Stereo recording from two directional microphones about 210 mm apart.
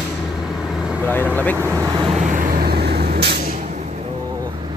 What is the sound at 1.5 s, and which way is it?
Speech, 10° right (ahead or behind).